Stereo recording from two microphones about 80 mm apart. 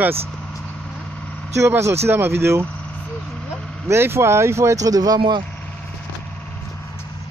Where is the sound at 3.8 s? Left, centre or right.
Right.